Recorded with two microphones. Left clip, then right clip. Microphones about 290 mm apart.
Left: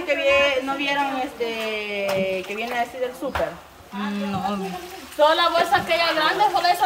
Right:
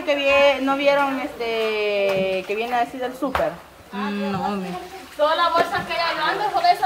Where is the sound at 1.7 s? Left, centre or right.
Centre.